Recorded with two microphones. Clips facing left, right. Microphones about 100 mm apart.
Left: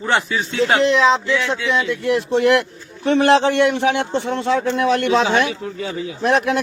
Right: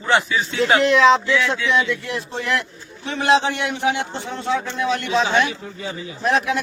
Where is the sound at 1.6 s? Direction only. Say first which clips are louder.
Left 2 dB; 40° left (ahead or behind); by 4.5 s 80° left.